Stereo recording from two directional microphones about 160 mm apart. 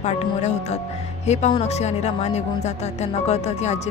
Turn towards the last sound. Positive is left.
turn(degrees=45)  # may be behind; listen again after turning